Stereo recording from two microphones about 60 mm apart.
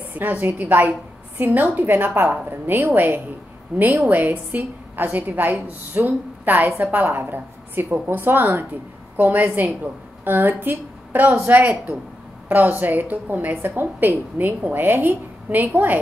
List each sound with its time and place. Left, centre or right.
0.1 s a woman's voice: right